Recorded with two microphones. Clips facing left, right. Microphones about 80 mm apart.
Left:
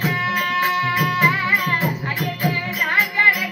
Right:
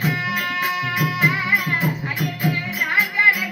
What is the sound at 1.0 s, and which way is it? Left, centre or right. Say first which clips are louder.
Music: even; centre.